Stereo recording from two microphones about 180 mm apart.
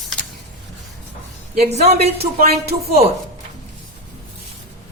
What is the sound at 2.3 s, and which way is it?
Speech, 55° right (ahead or behind).